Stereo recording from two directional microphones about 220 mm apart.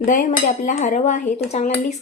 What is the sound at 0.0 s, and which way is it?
Speech, 35° left (ahead or behind).